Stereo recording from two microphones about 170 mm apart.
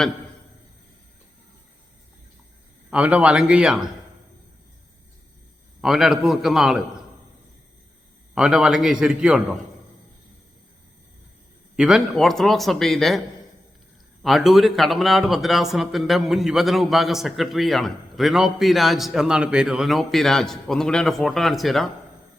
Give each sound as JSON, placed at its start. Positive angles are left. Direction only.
{"t": 2.9, "sound": "a man's voice", "side_deg": -10}
{"t": 5.8, "sound": "speech", "side_deg": -5}
{"t": 8.4, "sound": "speech", "side_deg": -5}
{"t": 11.8, "sound": "speech", "side_deg": -5}